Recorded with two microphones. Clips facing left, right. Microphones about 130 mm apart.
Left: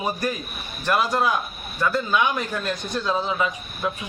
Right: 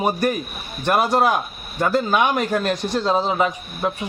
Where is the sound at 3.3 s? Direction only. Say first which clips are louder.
Right 4 dB; 45° right (ahead or behind).